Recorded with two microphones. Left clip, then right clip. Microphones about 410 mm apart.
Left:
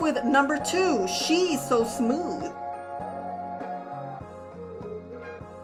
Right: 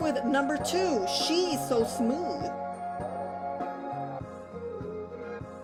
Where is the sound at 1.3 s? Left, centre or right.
Centre.